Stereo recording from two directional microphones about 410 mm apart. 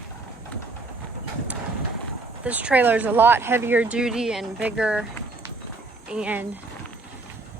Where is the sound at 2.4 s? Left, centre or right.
Centre.